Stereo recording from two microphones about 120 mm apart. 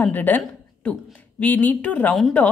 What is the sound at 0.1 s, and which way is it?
A woman's voice, 15° left (ahead or behind).